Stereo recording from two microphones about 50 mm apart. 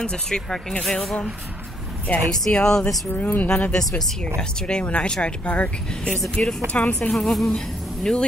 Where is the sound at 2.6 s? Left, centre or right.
Centre.